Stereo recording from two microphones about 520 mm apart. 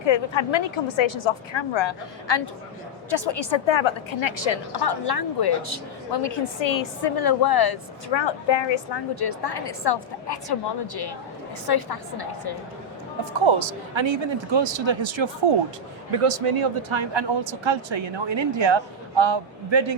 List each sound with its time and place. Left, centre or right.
0.0 s a woman's voice: left
13.4 s speech: right
16.1 s speech: right